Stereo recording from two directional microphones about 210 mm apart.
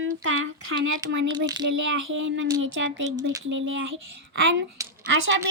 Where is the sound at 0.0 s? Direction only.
65° right (ahead or behind).